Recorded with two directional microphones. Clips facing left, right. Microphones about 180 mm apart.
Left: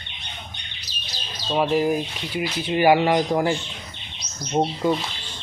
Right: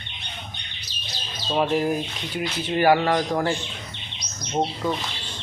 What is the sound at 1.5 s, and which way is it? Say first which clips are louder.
Speech: left 2 dB; 5° left (ahead or behind).